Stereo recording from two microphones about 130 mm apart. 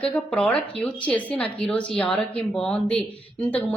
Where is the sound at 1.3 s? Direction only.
45° left (ahead or behind).